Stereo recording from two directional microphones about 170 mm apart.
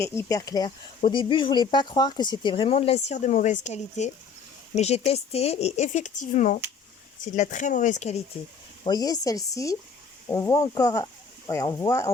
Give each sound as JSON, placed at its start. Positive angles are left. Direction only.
{"t": 0.0, "sound": "speech", "side_deg": 15}
{"t": 8.8, "sound": "speech", "side_deg": 20}